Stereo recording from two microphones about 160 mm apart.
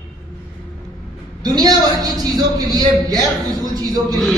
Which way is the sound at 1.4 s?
25° right (ahead or behind).